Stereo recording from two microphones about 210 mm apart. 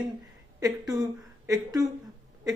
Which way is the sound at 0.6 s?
20° right (ahead or behind).